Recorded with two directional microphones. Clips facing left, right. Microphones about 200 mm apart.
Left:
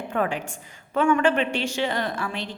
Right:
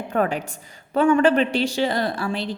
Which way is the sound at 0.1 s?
40° right (ahead or behind).